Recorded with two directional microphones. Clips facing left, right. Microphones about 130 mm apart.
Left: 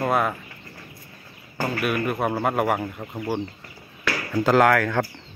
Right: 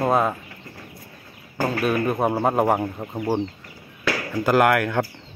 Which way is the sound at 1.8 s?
30° right (ahead or behind).